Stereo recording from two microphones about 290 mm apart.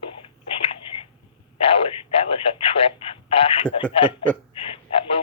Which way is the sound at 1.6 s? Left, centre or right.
Centre.